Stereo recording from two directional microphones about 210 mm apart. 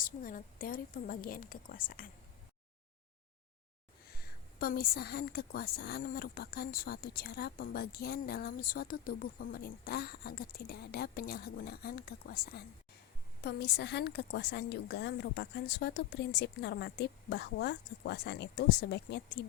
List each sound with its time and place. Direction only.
0.0 s a woman's voice: 40° left (ahead or behind)
4.6 s speech: 45° left (ahead or behind)